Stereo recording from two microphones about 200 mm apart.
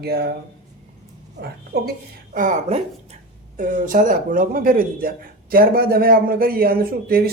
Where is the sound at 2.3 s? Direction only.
40° right (ahead or behind).